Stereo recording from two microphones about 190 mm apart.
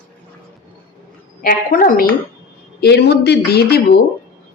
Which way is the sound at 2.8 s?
60° left (ahead or behind).